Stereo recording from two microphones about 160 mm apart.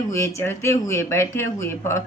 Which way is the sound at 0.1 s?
15° left (ahead or behind).